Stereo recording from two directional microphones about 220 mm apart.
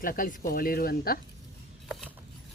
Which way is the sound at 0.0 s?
40° left (ahead or behind).